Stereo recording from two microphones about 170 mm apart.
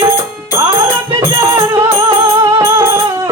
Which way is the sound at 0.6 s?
15° right (ahead or behind).